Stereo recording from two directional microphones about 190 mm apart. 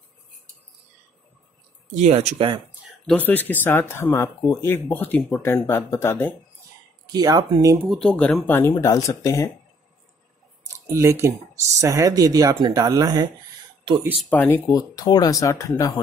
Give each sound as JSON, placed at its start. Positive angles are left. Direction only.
{"t": 2.0, "sound": "speech", "side_deg": -35}
{"t": 3.1, "sound": "speech", "side_deg": 10}
{"t": 7.1, "sound": "speech", "side_deg": -20}
{"t": 7.9, "sound": "speech", "side_deg": 5}
{"t": 11.0, "sound": "speech", "side_deg": -15}
{"t": 14.3, "sound": "speech", "side_deg": 10}